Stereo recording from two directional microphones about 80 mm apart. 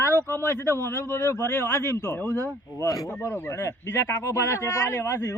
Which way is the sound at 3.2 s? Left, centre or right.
Left.